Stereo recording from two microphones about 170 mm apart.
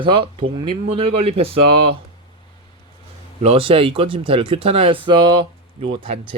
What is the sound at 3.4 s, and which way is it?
Speech, 35° right (ahead or behind).